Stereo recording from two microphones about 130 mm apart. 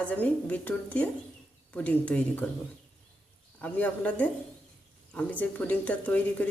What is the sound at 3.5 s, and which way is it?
Speech, 10° left (ahead or behind).